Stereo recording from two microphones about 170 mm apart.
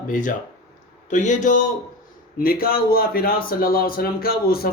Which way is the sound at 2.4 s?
60° left (ahead or behind).